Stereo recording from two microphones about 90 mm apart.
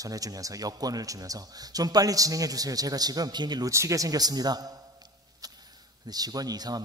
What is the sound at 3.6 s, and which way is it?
A man's voice, 35° right (ahead or behind).